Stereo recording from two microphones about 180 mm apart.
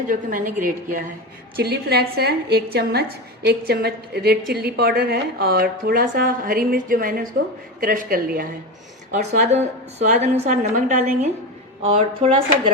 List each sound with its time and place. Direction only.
0.1 s a woman's voice: 45° right (ahead or behind)
1.5 s a woman's voice: 60° right (ahead or behind)
9.1 s a woman's voice: 45° right (ahead or behind)